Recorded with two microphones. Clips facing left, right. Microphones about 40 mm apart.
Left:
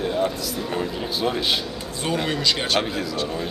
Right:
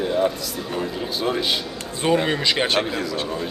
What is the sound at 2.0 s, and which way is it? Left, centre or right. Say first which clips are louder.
Speech: right 4 dB; right.